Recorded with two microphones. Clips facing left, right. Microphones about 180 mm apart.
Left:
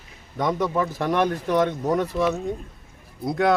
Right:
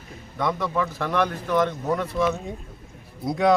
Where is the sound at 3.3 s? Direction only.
Centre (ahead or behind).